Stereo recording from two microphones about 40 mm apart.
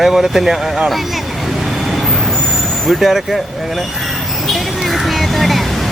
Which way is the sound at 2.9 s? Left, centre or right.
Centre.